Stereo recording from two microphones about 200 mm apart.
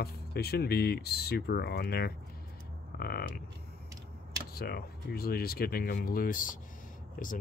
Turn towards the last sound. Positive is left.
turn(degrees=45)  # may be behind; listen again after turning